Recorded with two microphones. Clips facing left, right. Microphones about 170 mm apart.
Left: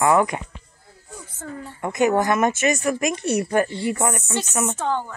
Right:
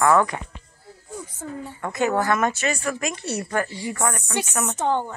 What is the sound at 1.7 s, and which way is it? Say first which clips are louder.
Speech: left 4 dB; 15° left (ahead or behind).